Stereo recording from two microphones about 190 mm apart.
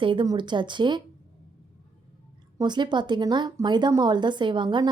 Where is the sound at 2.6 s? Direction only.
25° right (ahead or behind).